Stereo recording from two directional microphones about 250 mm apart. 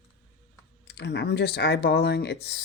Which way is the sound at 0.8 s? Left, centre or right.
Left.